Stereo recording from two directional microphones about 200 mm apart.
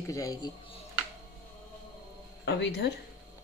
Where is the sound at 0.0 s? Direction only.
15° left (ahead or behind).